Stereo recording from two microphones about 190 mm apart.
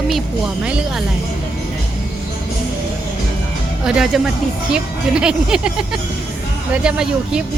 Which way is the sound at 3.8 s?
Centre (ahead or behind).